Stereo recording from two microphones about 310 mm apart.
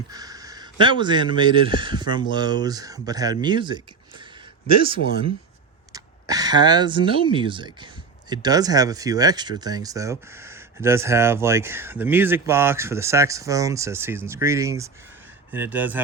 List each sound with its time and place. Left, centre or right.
0.1 s a man's voice: centre